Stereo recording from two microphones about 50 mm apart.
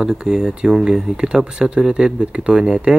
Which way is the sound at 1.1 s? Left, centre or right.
Centre.